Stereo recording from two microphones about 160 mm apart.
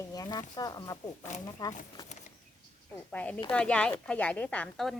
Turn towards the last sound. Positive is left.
turn(degrees=0)  # may be behind; listen again after turning